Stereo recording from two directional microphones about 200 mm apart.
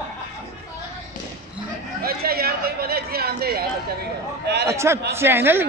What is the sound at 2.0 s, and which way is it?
Speech, 50° right (ahead or behind).